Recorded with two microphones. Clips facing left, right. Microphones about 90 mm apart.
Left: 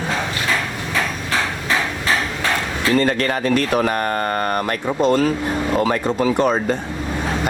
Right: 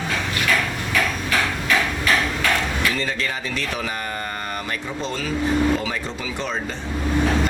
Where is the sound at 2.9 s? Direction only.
55° left (ahead or behind).